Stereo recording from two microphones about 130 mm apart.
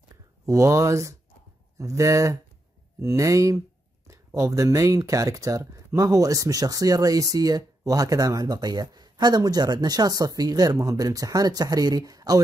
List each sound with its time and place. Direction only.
0.5 s speech: 25° right (ahead or behind)